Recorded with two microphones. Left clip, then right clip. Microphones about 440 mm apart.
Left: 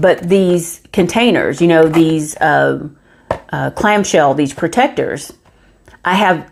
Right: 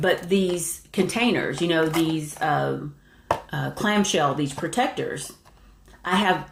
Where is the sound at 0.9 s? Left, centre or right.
Left.